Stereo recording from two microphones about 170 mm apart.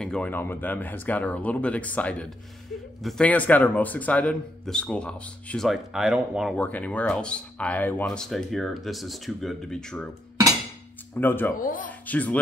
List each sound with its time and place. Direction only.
0.0 s a man's voice: 5° left (ahead or behind)
6.5 s speech: 10° left (ahead or behind)
11.1 s a man's voice: 10° left (ahead or behind)
11.5 s speech: 50° left (ahead or behind)
12.1 s a man's voice: 10° left (ahead or behind)